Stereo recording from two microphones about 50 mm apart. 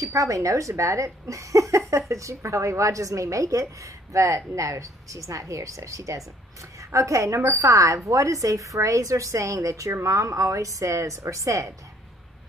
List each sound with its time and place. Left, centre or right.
0.0 s a woman's voice: right